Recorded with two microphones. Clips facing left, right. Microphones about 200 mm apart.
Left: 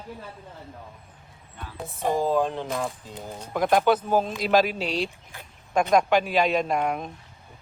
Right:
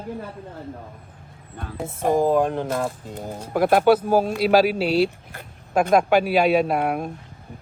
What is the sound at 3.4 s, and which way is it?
A man's voice, 5° right (ahead or behind).